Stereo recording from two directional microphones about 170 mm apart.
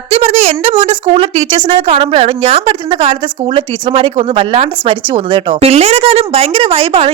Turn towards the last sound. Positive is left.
turn(degrees=-35)  # may be behind; listen again after turning